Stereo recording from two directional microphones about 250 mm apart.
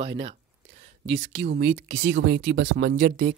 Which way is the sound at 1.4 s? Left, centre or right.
Right.